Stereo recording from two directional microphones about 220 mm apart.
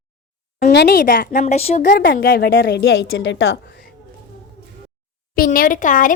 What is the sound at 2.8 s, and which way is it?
Speech, 60° left (ahead or behind).